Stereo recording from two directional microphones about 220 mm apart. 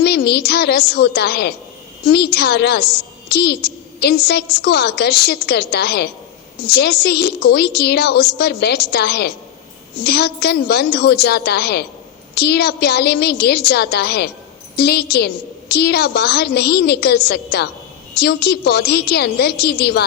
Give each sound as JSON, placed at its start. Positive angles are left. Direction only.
{"t": 0.0, "sound": "a woman's voice", "side_deg": 45}